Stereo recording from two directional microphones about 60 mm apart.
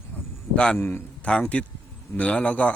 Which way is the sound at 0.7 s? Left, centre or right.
Left.